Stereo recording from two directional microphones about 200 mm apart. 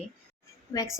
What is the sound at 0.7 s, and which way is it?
Speech, 20° left (ahead or behind).